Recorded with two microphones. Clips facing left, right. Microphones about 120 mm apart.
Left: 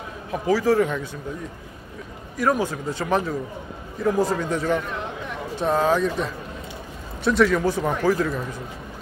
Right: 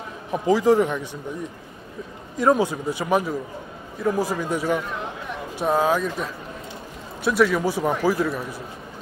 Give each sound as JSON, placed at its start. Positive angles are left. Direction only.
{"t": 0.3, "sound": "a man's voice", "side_deg": -20}
{"t": 2.3, "sound": "a man's voice", "side_deg": -20}